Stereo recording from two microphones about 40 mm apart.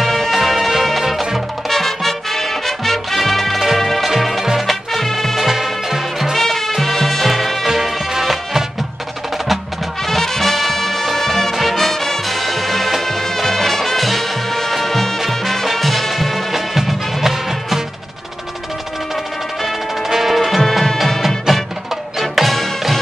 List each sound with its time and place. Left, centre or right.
0.0 s music: centre
5.4 s music: centre
6.3 s music: centre
10.0 s music: centre
20.0 s music: centre